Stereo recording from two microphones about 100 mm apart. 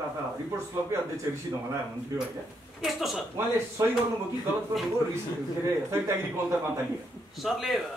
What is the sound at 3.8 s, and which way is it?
Speech, 35° right (ahead or behind).